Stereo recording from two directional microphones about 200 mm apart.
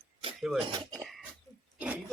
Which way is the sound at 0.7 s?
20° right (ahead or behind).